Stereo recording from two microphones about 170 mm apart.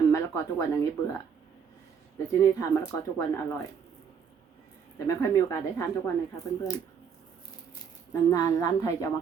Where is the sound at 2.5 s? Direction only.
20° left (ahead or behind).